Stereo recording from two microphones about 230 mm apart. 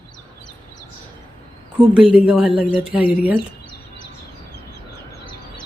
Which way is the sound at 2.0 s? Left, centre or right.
Centre.